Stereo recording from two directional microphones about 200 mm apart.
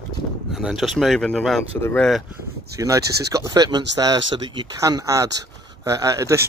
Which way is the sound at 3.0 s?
55° right (ahead or behind).